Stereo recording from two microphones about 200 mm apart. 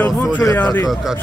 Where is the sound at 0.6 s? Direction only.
20° left (ahead or behind).